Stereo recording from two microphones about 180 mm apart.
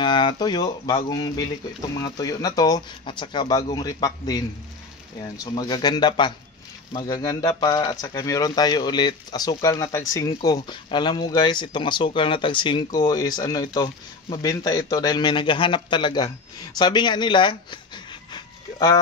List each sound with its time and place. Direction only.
0.0 s speech: 25° left (ahead or behind)